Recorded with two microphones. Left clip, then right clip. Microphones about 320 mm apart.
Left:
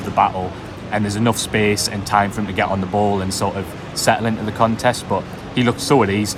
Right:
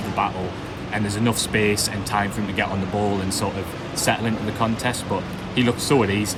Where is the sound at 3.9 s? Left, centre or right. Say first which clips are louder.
Left 5 dB; centre.